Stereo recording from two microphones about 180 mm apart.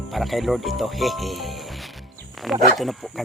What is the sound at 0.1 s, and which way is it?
Speech, centre (ahead or behind).